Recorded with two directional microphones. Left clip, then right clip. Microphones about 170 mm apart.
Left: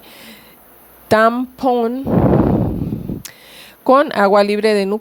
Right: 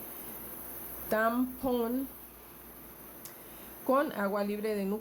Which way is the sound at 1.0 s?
70° left (ahead or behind).